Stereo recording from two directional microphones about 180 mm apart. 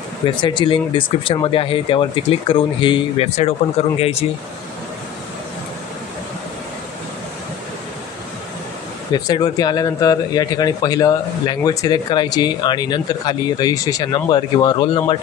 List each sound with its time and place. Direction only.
0.4 s speech: 25° left (ahead or behind)
9.1 s speech: 20° left (ahead or behind)